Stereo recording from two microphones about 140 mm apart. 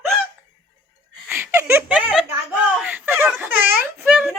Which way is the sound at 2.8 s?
15° right (ahead or behind).